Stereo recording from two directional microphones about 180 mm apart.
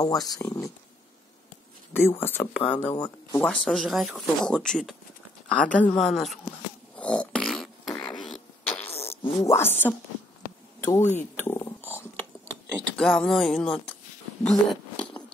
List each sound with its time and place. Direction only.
0.0 s speech: 20° left (ahead or behind)
2.0 s speech: 10° left (ahead or behind)
3.4 s speech: centre (ahead or behind)
7.0 s beatboxing: 5° left (ahead or behind)
8.0 s a sound: 25° left (ahead or behind)
8.3 s a sound: 10° left (ahead or behind)
8.9 s fart: 35° left (ahead or behind)
9.4 s speech: 15° left (ahead or behind)
10.8 s a sound: 10° left (ahead or behind)